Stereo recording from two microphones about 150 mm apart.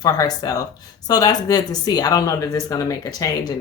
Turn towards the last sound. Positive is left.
turn(degrees=25)  # may be behind; listen again after turning